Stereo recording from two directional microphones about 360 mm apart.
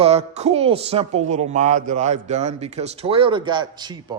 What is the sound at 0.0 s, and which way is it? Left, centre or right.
Speech, centre.